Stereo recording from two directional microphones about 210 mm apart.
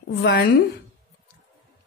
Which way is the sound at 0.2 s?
50° left (ahead or behind).